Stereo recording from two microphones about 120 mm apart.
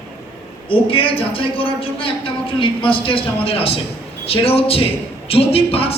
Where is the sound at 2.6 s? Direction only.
45° left (ahead or behind).